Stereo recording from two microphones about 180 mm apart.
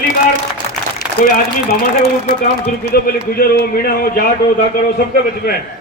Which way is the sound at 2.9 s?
55° left (ahead or behind).